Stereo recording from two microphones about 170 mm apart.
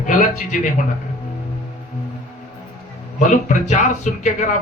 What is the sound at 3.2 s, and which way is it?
A man's voice, 45° left (ahead or behind).